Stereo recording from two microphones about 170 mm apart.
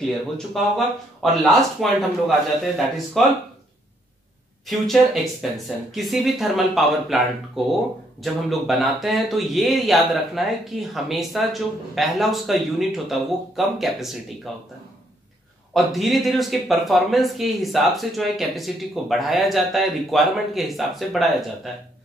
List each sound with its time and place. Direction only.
0.5 s speech: centre (ahead or behind)
4.6 s speech: centre (ahead or behind)
15.7 s speech: centre (ahead or behind)